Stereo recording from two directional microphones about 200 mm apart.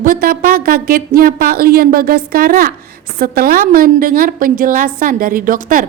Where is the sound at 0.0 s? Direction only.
45° right (ahead or behind).